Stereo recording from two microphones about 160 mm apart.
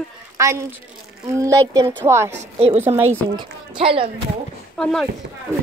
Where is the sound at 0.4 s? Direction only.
20° right (ahead or behind).